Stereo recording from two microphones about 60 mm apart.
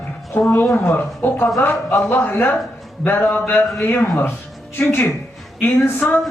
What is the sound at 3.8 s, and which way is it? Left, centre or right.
Speech, left.